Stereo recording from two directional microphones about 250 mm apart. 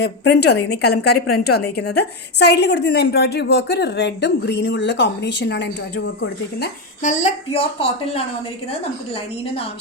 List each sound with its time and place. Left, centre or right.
0.0 s a woman's voice: left
7.0 s a woman's voice: left